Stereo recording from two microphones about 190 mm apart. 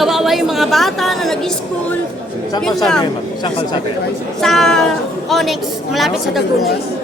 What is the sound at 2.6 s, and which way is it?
Speech, 5° left (ahead or behind).